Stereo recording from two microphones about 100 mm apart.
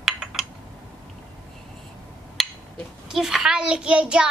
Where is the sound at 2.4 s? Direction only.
Centre (ahead or behind).